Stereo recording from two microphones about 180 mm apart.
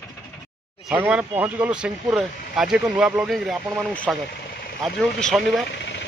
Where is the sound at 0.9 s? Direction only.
5° right (ahead or behind).